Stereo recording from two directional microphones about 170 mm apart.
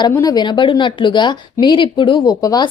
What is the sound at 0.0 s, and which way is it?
Speech, 25° left (ahead or behind).